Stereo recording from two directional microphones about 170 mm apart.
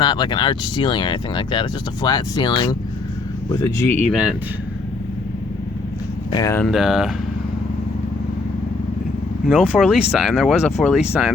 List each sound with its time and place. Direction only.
0.0 s speech: 25° left (ahead or behind)
3.5 s speech: 15° left (ahead or behind)
4.1 s speech: 5° right (ahead or behind)
6.3 s speech: 15° left (ahead or behind)
6.7 s speech: centre (ahead or behind)
9.5 s speech: 5° right (ahead or behind)